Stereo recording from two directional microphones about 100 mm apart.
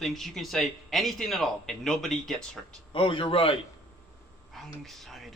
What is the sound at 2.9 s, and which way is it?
Speech, 65° left (ahead or behind).